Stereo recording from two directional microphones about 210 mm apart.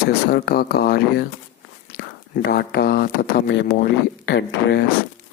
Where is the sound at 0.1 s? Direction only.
50° left (ahead or behind).